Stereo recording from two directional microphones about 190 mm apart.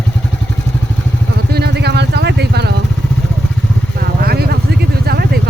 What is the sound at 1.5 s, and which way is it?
Vehicle, 55° right (ahead or behind).